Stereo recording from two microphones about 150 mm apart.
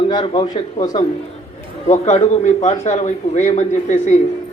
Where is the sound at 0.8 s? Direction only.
25° left (ahead or behind).